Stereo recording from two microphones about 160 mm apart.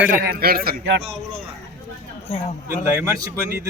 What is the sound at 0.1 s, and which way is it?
Speech, 70° right (ahead or behind).